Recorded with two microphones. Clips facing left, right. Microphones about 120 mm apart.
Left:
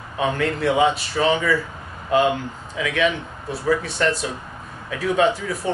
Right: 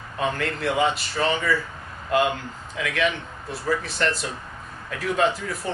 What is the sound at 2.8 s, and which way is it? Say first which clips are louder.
Speech: left 3 dB; centre (ahead or behind).